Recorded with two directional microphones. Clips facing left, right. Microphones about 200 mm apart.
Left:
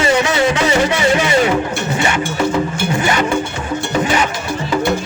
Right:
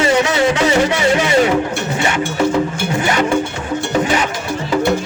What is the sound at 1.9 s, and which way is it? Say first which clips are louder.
Music: right 1 dB; 40° right (ahead or behind).